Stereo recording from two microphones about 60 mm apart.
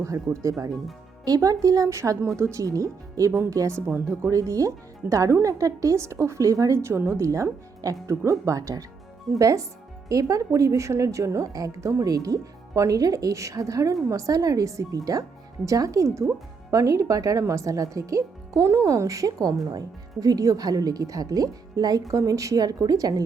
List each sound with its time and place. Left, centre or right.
0.4 s speech: right
1.2 s speech: right
1.9 s speech: right
3.8 s speech: right
4.3 s speech: right
6.8 s speech: right
7.8 s speech: right
12.0 s speech: right
16.7 s speech: right
17.4 s speech: right
20.1 s a woman's voice: right